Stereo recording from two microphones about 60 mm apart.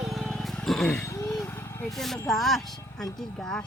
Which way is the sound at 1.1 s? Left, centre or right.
Left.